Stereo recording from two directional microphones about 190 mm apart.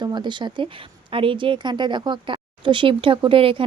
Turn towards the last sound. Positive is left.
turn(degrees=-30)  # may be behind; listen again after turning